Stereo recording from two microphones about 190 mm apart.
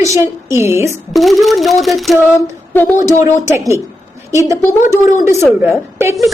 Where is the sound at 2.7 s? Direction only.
10° left (ahead or behind).